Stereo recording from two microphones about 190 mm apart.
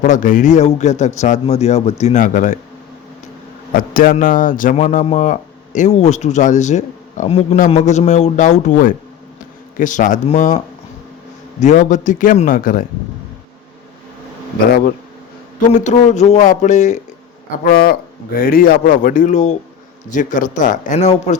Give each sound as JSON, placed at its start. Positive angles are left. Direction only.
{"t": 0.0, "sound": "speech", "side_deg": 40}
{"t": 3.8, "sound": "speech", "side_deg": 50}
{"t": 11.6, "sound": "speech", "side_deg": 40}
{"t": 15.7, "sound": "speech", "side_deg": 40}
{"t": 17.6, "sound": "speech", "side_deg": 55}